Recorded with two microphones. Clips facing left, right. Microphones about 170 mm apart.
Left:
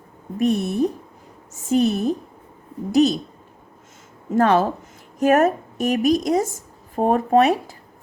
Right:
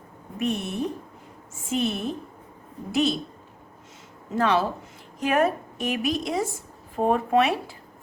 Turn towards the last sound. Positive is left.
turn(degrees=40)  # may be behind; listen again after turning